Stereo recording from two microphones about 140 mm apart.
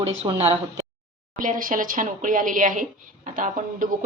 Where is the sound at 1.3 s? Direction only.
75° right (ahead or behind).